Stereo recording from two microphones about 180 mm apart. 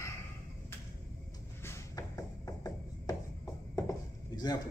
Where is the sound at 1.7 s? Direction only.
15° left (ahead or behind).